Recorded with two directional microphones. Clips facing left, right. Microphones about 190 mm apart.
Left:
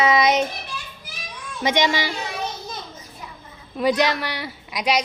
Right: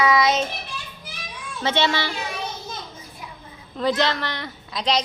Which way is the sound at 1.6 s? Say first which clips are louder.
Left 2 dB; 15° left (ahead or behind).